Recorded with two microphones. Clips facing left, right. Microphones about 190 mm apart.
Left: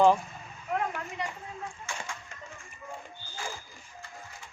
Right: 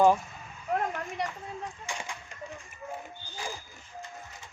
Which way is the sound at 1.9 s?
15° right (ahead or behind).